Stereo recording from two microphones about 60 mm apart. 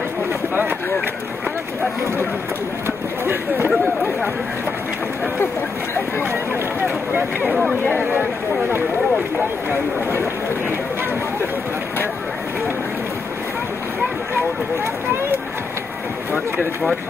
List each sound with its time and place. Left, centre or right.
3.3 s speech: right
7.2 s speech: right